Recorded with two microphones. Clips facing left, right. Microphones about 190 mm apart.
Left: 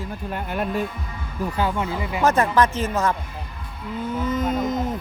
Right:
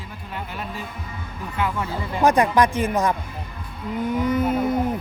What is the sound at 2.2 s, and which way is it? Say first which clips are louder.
Speech: right 2 dB; 15° right (ahead or behind).